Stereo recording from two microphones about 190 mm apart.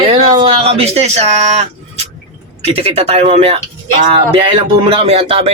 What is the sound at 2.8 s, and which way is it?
Speech, 30° right (ahead or behind).